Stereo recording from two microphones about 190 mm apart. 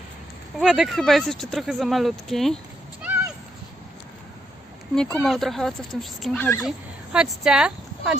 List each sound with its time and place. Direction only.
0.6 s speech: centre (ahead or behind)
4.9 s speech: 5° left (ahead or behind)
6.4 s speech: 15° left (ahead or behind)
6.7 s speech: 5° right (ahead or behind)